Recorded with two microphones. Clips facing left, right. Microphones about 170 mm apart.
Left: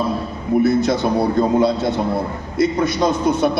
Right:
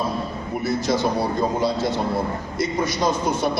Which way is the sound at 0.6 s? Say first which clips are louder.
Left 4 dB; 60° left (ahead or behind).